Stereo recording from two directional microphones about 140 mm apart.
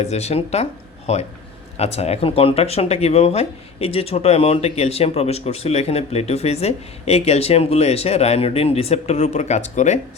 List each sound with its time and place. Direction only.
0.0 s speech: 50° left (ahead or behind)